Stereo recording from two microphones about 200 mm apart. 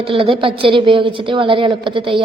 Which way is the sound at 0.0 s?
25° right (ahead or behind).